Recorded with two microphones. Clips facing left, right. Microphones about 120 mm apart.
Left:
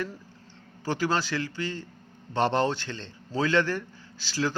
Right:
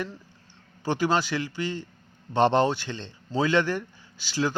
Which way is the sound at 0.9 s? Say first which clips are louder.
Right 3 dB; 20° right (ahead or behind).